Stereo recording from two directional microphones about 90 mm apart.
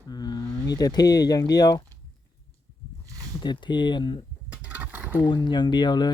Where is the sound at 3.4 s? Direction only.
55° left (ahead or behind).